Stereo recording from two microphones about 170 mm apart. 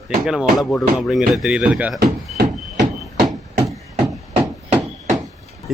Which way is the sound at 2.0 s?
75° right (ahead or behind).